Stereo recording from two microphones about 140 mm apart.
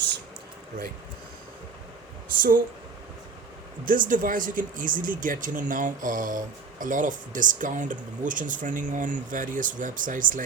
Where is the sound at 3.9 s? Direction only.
70° right (ahead or behind).